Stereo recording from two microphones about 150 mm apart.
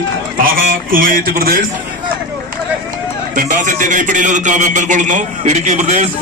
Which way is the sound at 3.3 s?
60° right (ahead or behind).